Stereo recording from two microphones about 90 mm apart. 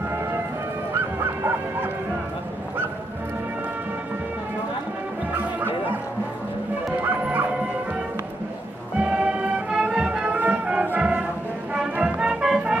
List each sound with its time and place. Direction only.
1.4 s bow-wow: 25° right (ahead or behind)
7.0 s music: 20° right (ahead or behind)
8.9 s music: 15° right (ahead or behind)